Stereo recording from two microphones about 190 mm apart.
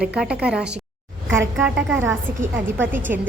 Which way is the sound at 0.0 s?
5° right (ahead or behind).